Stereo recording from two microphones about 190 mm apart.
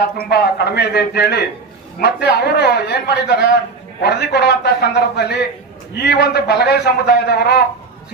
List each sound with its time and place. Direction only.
0.2 s a man's voice: 60° left (ahead or behind)